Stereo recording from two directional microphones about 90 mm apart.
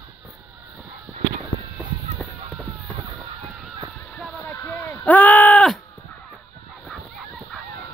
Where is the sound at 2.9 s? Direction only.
60° right (ahead or behind).